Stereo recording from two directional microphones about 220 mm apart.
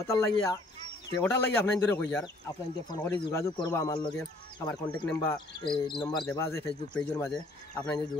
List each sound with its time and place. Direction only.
0.0 s speech: 15° left (ahead or behind)